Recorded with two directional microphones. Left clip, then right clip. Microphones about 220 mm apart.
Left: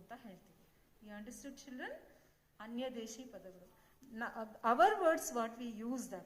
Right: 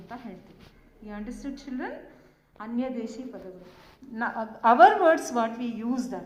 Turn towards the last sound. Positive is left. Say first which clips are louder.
# right 13 dB
turn(degrees=50)  # may be behind; listen again after turning